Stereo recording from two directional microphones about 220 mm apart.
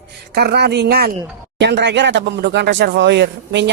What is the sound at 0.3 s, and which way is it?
Speech, 45° right (ahead or behind).